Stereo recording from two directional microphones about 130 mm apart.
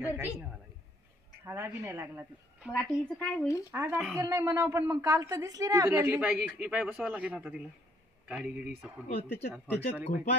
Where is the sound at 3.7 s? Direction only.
20° right (ahead or behind).